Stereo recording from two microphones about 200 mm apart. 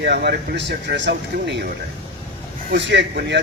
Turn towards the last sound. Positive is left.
turn(degrees=-60)  # may be behind; listen again after turning